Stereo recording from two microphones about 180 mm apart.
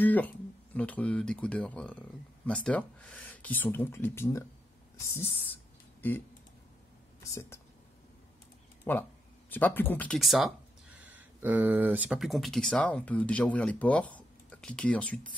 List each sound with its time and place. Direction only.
0.0 s speech: 10° left (ahead or behind)
5.9 s a sound: 10° left (ahead or behind)
7.3 s speech: 15° left (ahead or behind)
8.9 s speech: 10° left (ahead or behind)